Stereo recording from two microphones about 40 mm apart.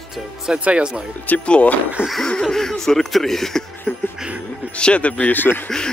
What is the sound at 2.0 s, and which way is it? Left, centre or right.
Cough, left.